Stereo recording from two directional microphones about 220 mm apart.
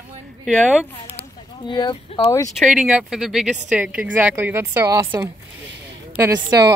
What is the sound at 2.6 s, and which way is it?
Speech, 5° right (ahead or behind).